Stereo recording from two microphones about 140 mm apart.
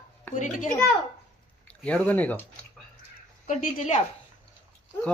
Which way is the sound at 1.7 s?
10° left (ahead or behind).